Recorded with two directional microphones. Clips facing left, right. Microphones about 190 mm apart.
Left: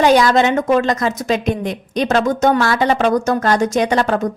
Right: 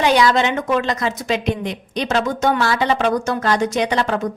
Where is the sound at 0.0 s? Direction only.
45° left (ahead or behind).